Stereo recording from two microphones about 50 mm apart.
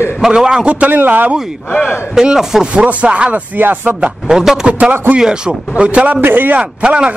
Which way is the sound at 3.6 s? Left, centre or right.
Right.